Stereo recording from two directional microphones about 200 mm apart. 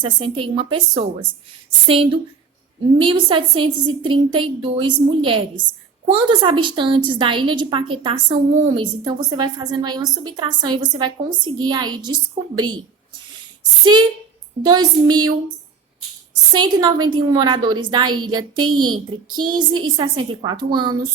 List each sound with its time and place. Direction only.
0.0 s a woman's voice: 25° right (ahead or behind)
13.9 s a woman's voice: 20° right (ahead or behind)
16.5 s a woman's voice: 20° right (ahead or behind)